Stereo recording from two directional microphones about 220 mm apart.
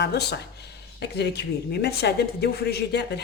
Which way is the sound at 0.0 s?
50° left (ahead or behind).